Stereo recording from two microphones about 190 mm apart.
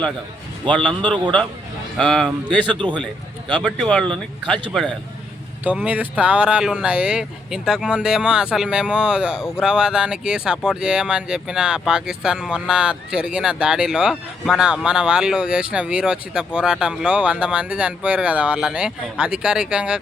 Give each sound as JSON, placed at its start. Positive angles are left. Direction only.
{"t": 0.6, "sound": "a man's voice", "side_deg": -25}
{"t": 2.0, "sound": "speech", "side_deg": 5}
{"t": 2.6, "sound": "a man's voice", "side_deg": -25}
{"t": 3.6, "sound": "speech", "side_deg": 5}
{"t": 5.6, "sound": "speech", "side_deg": -5}